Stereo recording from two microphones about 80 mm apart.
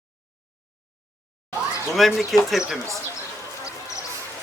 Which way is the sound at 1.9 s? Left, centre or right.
Centre.